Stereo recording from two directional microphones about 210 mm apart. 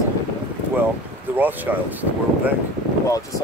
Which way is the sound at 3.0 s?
15° left (ahead or behind).